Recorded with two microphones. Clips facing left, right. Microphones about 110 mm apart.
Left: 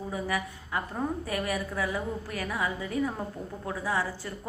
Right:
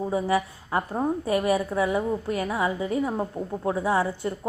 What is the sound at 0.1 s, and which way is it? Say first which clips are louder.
A woman's voice: right 6 dB; 30° right (ahead or behind).